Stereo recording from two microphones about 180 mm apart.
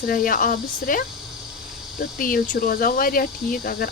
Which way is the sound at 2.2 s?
50° left (ahead or behind).